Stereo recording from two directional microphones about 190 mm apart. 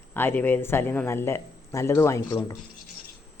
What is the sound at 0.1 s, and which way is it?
A man's voice, 10° left (ahead or behind).